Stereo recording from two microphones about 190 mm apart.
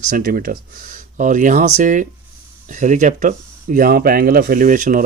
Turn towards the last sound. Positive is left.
turn(degrees=-45)  # may be behind; listen again after turning